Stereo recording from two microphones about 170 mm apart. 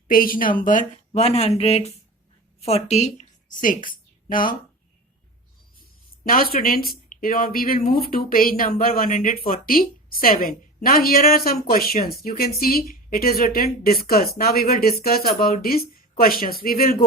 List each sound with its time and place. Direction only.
0.1 s a woman's voice: 55° left (ahead or behind)
3.8 s a sound: 55° left (ahead or behind)
6.2 s a woman's voice: 60° left (ahead or behind)